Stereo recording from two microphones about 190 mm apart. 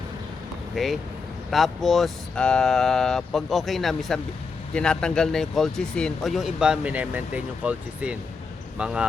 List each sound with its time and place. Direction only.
0.8 s speech: centre (ahead or behind)